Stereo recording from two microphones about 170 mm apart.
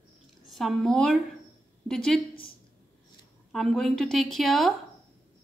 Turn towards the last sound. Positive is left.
turn(degrees=0)  # may be behind; listen again after turning